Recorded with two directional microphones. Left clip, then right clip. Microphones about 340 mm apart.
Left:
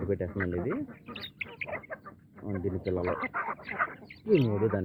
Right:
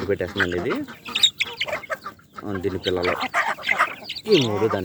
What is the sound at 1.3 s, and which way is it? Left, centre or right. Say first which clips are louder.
Chicken: right 13 dB; right.